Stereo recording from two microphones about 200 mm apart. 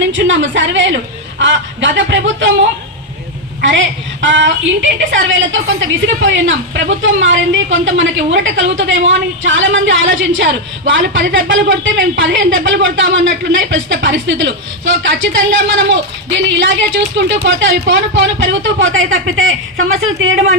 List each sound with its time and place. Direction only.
0.1 s a woman's voice: 65° right (ahead or behind)
1.4 s fowl: 65° right (ahead or behind)
3.6 s a woman's voice: 65° right (ahead or behind); by 20.4 s 85° right